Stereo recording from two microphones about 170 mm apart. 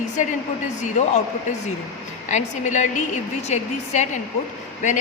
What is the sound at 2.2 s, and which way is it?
A woman's voice, 45° left (ahead or behind).